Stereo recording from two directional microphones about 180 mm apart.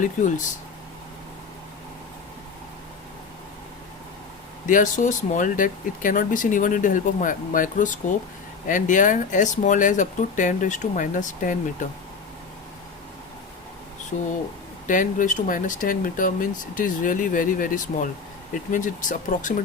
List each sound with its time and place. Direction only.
0.0 s speech: 45° left (ahead or behind)
4.6 s speech: 45° left (ahead or behind)
14.1 s speech: 45° left (ahead or behind)